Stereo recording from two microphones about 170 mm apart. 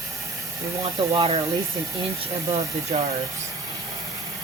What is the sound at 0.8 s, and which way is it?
Speech, 30° right (ahead or behind).